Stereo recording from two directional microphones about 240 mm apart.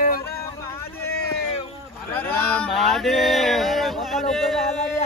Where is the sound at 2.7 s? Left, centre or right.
Centre.